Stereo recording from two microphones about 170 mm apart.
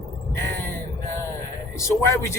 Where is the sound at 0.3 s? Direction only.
15° left (ahead or behind).